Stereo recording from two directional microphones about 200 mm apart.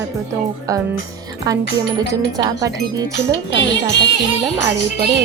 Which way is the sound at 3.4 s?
60° left (ahead or behind).